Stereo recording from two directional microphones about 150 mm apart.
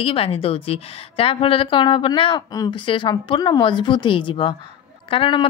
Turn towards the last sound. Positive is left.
turn(degrees=35)  # may be behind; listen again after turning